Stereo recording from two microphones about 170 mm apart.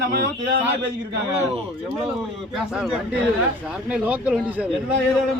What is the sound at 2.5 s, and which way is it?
Speech, 5° right (ahead or behind).